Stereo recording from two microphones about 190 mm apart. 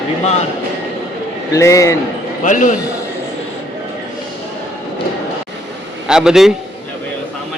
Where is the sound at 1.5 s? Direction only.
15° left (ahead or behind).